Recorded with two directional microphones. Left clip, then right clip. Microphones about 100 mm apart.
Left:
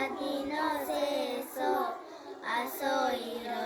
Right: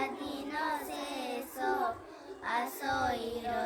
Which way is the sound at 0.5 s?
35° right (ahead or behind).